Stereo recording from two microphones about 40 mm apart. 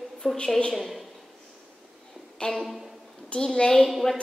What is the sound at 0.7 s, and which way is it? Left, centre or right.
Speech, centre.